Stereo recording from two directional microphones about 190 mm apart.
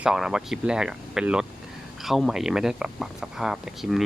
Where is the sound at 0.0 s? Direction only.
5° right (ahead or behind).